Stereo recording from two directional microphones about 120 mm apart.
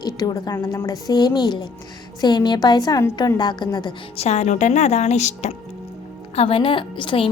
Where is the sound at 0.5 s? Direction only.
25° left (ahead or behind).